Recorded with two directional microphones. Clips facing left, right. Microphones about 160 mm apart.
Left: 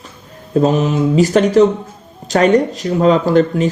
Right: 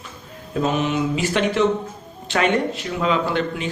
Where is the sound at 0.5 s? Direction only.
35° left (ahead or behind).